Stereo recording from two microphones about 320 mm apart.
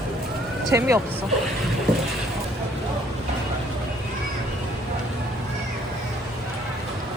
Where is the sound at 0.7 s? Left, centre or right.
Centre.